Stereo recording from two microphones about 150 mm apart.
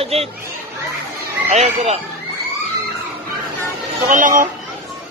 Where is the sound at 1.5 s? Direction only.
50° right (ahead or behind).